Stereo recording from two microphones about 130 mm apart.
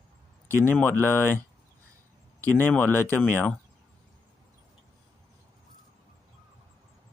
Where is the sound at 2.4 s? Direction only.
15° left (ahead or behind).